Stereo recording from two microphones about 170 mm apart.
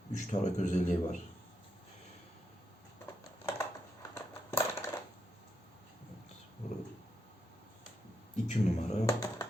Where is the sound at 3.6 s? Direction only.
15° left (ahead or behind).